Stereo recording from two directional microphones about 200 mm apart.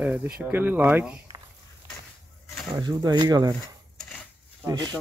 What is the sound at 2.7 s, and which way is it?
Speech, 20° right (ahead or behind).